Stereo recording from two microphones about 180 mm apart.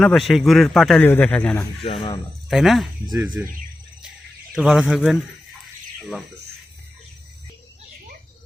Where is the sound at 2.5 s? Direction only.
Centre (ahead or behind).